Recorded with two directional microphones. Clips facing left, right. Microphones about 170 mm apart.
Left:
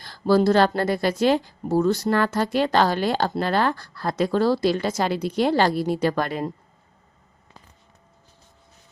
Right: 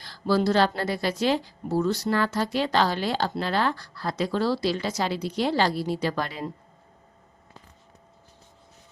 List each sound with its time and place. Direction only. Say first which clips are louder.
0.0 s speech: left 5 dB; 50° left (ahead or behind)